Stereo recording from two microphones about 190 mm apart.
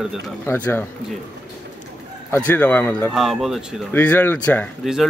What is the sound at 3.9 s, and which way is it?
Speech, 10° left (ahead or behind).